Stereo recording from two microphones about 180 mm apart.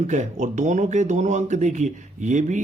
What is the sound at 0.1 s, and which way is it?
Speech, 40° right (ahead or behind).